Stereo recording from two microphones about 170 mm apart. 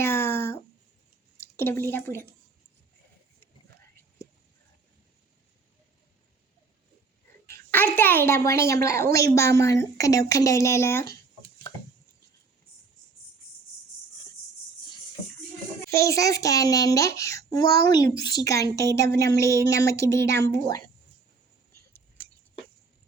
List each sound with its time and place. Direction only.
0.0 s a sound: 15° left (ahead or behind)
1.4 s speech: 15° left (ahead or behind)
7.4 s a sound: 10° left (ahead or behind)
8.4 s a woman's voice: 15° left (ahead or behind)
15.9 s a child's voice: 20° left (ahead or behind)
20.2 s a woman's voice: 80° right